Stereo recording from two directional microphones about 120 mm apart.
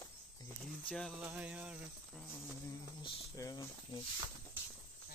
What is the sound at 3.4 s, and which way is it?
Speech, 30° left (ahead or behind).